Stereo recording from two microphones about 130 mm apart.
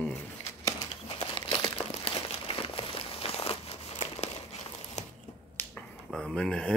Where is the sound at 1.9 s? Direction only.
45° left (ahead or behind).